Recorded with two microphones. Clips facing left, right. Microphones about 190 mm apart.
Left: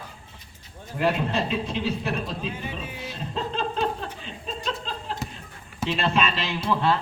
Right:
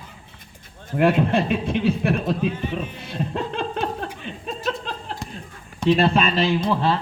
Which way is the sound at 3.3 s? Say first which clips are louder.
Left 1 dB; 55° right (ahead or behind).